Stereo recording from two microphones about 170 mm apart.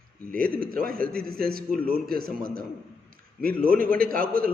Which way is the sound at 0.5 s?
60° right (ahead or behind).